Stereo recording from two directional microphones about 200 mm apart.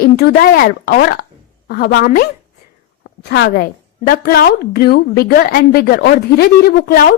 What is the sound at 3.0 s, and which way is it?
A woman's voice, 60° left (ahead or behind).